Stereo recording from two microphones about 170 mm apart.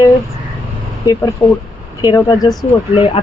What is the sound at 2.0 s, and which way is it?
Speech, 25° left (ahead or behind).